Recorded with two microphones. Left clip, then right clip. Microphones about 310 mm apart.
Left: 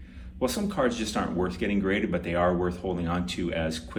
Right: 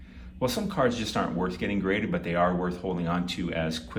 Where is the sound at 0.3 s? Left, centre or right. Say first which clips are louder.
Even; centre.